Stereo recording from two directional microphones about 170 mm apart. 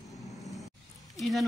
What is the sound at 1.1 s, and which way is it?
Speech, centre (ahead or behind).